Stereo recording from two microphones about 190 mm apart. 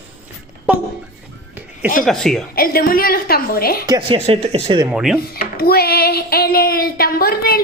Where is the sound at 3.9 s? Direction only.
25° right (ahead or behind).